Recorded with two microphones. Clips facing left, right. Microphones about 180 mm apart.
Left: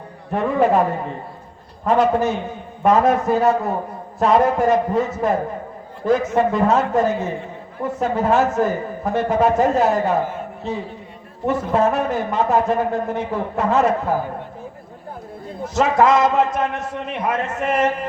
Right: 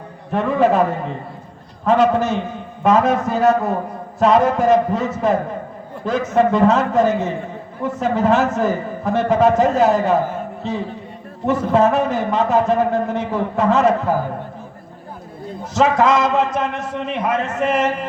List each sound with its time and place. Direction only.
0.3 s a man's voice: 90° right
11.4 s a man's voice: 90° right
15.7 s a man's voice: 90° right